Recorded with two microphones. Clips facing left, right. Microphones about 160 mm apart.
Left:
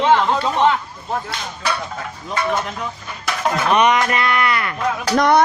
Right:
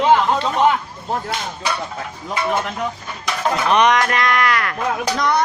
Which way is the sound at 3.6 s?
5° left (ahead or behind).